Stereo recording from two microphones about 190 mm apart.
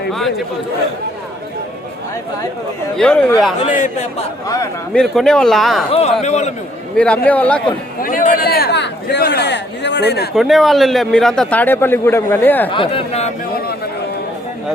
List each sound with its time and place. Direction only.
0.1 s a man's voice: centre (ahead or behind)
3.0 s a man's voice: 5° left (ahead or behind)
3.6 s a man's voice: 45° left (ahead or behind)
4.4 s speech: 20° left (ahead or behind)
5.1 s a man's voice: 5° left (ahead or behind)
5.9 s speech: 35° left (ahead or behind)
6.9 s speech: 5° left (ahead or behind)
8.0 s a sound: 45° left (ahead or behind); by 10.2 s 60° left (ahead or behind)
10.3 s a man's voice: centre (ahead or behind)
12.7 s speech: 30° left (ahead or behind)